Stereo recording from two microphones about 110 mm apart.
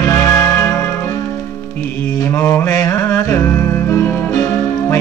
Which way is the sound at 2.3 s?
25° left (ahead or behind).